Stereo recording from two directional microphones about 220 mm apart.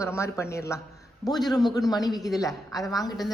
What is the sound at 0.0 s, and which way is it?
Speech, 10° left (ahead or behind).